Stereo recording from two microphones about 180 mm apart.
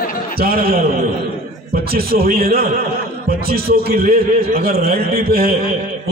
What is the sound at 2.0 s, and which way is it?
A man's voice, 55° right (ahead or behind).